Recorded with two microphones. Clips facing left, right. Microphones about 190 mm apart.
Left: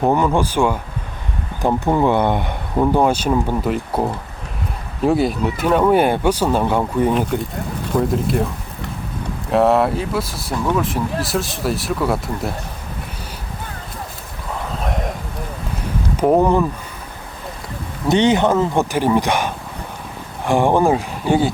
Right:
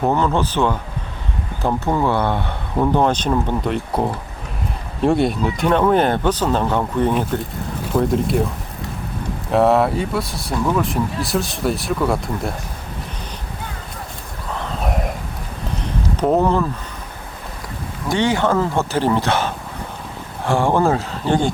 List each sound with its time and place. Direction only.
0.0 s speech: 10° left (ahead or behind)
7.9 s speech: centre (ahead or behind)
9.5 s speech: centre (ahead or behind)
16.1 s speech: 10° left (ahead or behind)
18.1 s speech: 20° left (ahead or behind)